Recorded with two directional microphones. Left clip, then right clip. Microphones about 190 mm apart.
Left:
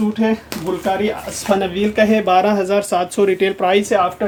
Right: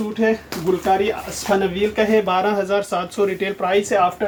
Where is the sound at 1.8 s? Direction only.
50° left (ahead or behind).